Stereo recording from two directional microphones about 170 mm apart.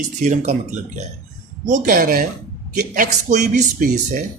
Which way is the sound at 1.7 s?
50° right (ahead or behind).